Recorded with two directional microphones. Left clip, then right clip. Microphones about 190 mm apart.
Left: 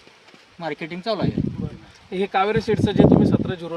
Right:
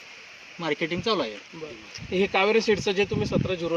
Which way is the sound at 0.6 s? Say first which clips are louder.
Right 2 dB; 30° left (ahead or behind).